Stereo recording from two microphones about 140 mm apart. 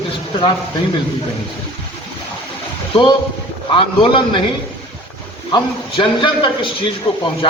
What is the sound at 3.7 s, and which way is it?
Speech, 35° left (ahead or behind).